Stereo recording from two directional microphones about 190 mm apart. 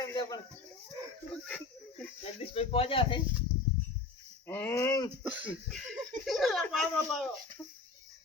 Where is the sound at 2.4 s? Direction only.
30° left (ahead or behind).